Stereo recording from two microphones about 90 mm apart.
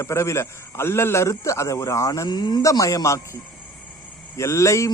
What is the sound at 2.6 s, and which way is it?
Speech, 40° left (ahead or behind).